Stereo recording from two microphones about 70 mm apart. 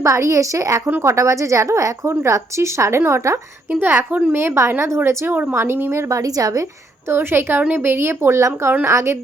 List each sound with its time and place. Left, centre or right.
0.0 s a woman's voice: right
3.7 s a woman's voice: right
5.0 s a woman's voice: right
7.1 s a woman's voice: right